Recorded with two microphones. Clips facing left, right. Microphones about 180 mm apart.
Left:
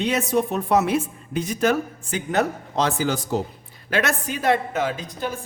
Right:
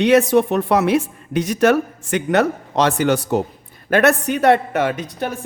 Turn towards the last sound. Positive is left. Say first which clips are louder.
# right 4 dB
turn(degrees=-65)  # may be behind; listen again after turning